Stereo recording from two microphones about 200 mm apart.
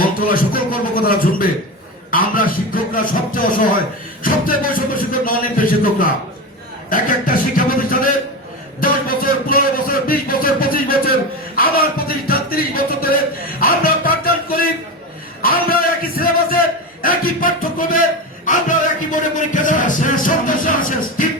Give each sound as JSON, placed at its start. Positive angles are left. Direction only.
{"t": 0.0, "sound": "a man's voice", "side_deg": 45}
{"t": 13.6, "sound": "music", "side_deg": 45}
{"t": 15.4, "sound": "a sound", "side_deg": 45}
{"t": 18.4, "sound": "music", "side_deg": 40}